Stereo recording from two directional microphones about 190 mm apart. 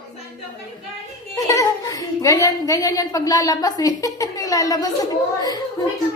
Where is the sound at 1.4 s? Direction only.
20° left (ahead or behind).